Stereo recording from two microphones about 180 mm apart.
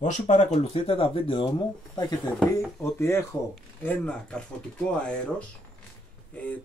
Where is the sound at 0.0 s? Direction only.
40° left (ahead or behind).